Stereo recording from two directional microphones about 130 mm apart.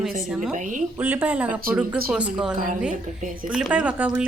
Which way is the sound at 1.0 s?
10° right (ahead or behind).